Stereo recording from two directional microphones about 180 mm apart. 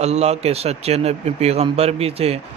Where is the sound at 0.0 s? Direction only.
40° right (ahead or behind).